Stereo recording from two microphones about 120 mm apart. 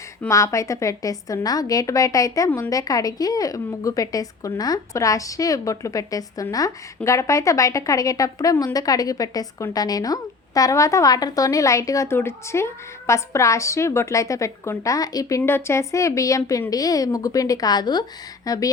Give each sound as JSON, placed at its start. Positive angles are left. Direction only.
{"t": 0.3, "sound": "a woman's voice", "side_deg": 25}
{"t": 15.4, "sound": "a woman's voice", "side_deg": 20}